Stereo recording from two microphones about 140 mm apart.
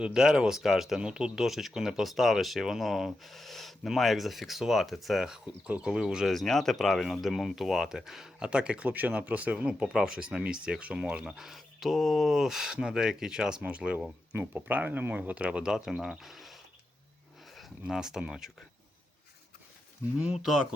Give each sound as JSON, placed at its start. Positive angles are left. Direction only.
{"t": 0.0, "sound": "speech", "side_deg": -5}
{"t": 20.1, "sound": "speech", "side_deg": -5}